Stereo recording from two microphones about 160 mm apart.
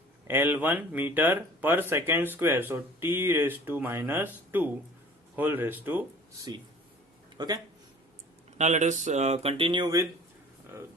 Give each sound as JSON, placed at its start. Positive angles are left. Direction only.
{"t": 0.3, "sound": "speech", "side_deg": -10}
{"t": 7.3, "sound": "speech", "side_deg": -25}
{"t": 8.5, "sound": "speech", "side_deg": -45}